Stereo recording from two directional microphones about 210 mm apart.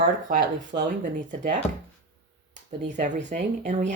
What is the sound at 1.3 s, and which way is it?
Speech, 35° right (ahead or behind).